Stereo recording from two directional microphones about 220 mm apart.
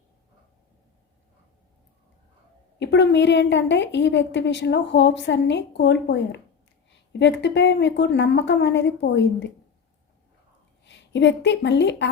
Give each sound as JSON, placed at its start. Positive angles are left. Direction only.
{"t": 2.7, "sound": "a woman's voice", "side_deg": 50}
{"t": 10.8, "sound": "a woman's voice", "side_deg": 55}